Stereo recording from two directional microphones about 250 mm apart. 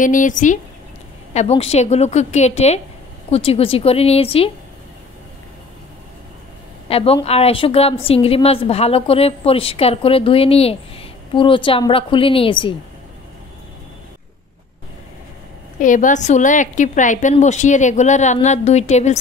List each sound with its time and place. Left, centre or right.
0.0 s a woman's voice: left
6.9 s a woman's voice: left
15.8 s a woman's voice: left